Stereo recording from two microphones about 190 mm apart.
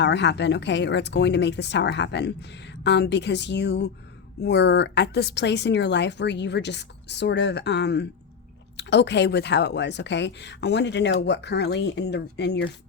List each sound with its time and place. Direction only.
0.0 s speech: 65° left (ahead or behind)